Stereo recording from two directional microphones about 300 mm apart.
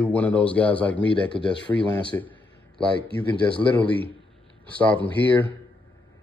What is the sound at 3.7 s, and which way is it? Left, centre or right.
Speech, centre.